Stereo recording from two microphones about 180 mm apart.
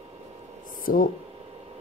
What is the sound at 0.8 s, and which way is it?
Speech, 50° left (ahead or behind).